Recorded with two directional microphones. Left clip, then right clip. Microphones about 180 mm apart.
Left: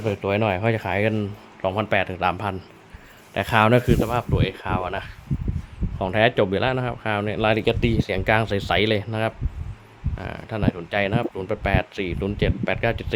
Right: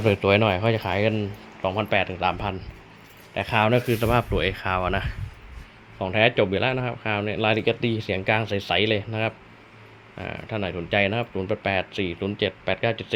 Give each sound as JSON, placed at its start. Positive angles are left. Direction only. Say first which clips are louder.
{"t": 0.0, "sound": "speech", "louder": "right 3 dB", "side_deg": -10}
{"t": 4.0, "sound": "speech", "louder": "right 2 dB", "side_deg": 0}
{"t": 6.0, "sound": "speech", "louder": "left 1 dB", "side_deg": 15}